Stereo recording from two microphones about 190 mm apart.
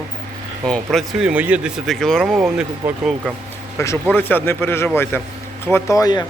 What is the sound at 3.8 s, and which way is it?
Speech, 15° left (ahead or behind).